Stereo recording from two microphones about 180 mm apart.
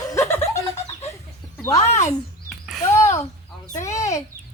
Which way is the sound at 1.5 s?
15° left (ahead or behind).